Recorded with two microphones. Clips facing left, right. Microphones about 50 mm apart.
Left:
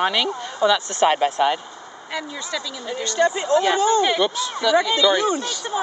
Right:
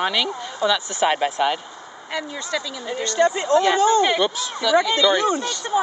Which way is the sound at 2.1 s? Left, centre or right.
Right.